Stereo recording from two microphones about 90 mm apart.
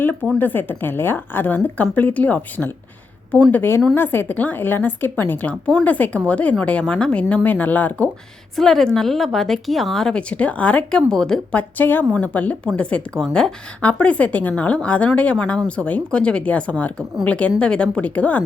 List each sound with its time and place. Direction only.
0.3 s a woman's voice: 20° left (ahead or behind)
8.5 s speech: 5° left (ahead or behind)
11.5 s a woman's voice: 20° left (ahead or behind)